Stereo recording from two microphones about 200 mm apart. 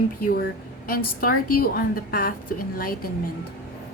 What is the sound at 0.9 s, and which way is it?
Speech, 45° left (ahead or behind).